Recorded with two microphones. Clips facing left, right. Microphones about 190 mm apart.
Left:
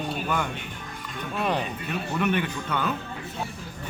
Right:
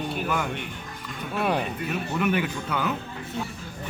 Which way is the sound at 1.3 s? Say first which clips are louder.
Right 2 dB; 10° right (ahead or behind).